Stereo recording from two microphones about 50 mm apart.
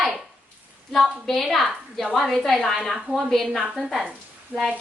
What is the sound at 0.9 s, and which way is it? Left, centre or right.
A woman's voice, centre.